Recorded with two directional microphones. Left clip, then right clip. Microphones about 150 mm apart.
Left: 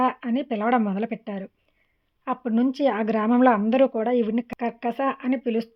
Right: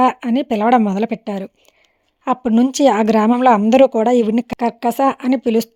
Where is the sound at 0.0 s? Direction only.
45° right (ahead or behind).